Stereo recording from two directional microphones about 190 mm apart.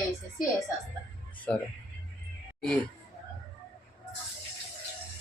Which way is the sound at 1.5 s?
5° left (ahead or behind).